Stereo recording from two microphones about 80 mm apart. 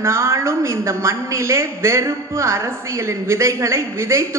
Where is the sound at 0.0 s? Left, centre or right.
Right.